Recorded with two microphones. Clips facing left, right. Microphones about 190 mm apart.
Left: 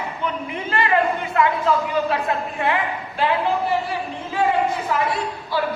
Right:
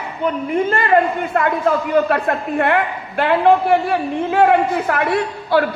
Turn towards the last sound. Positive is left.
turn(degrees=-65)  # may be behind; listen again after turning